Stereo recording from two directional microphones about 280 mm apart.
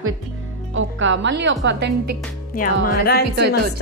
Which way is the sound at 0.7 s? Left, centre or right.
Right.